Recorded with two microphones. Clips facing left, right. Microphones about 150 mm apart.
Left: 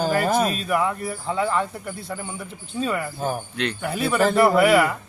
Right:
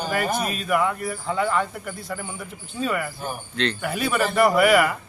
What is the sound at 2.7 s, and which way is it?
Speech, 25° left (ahead or behind).